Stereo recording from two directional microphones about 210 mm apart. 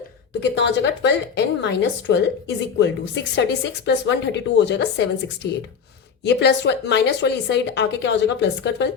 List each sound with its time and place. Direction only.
0.3 s a woman's voice: 55° left (ahead or behind)